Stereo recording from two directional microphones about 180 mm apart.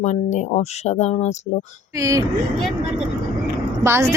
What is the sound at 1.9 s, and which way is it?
Speech, 15° right (ahead or behind).